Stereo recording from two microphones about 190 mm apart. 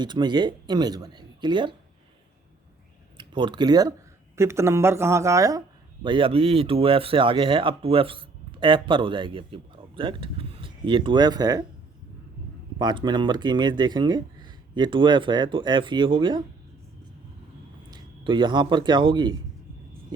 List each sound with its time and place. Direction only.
0.0 s speech: 25° right (ahead or behind)
3.2 s speech: 25° right (ahead or behind)
12.8 s speech: 25° right (ahead or behind)
17.9 s speech: 25° right (ahead or behind)